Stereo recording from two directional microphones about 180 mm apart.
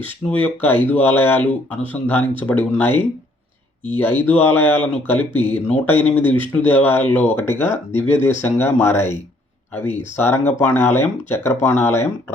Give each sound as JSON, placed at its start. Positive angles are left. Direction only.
{"t": 0.3, "sound": "speech", "side_deg": 10}
{"t": 3.9, "sound": "speech", "side_deg": 10}
{"t": 10.2, "sound": "speech", "side_deg": 10}